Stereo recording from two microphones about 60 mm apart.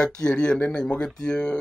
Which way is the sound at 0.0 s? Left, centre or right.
Centre.